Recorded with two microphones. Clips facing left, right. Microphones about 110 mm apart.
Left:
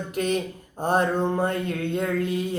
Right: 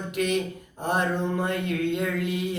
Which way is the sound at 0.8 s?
35° left (ahead or behind).